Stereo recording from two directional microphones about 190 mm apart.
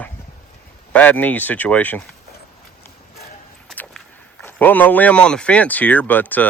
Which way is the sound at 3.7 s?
Centre (ahead or behind).